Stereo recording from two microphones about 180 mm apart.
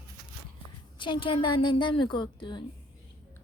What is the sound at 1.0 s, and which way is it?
A woman's voice, 25° left (ahead or behind).